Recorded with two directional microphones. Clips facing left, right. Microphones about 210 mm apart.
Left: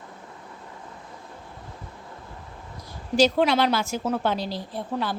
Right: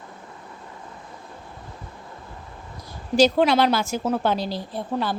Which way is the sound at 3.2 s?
40° right (ahead or behind).